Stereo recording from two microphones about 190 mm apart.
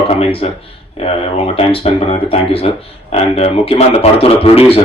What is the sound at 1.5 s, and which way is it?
A man's voice, 30° left (ahead or behind).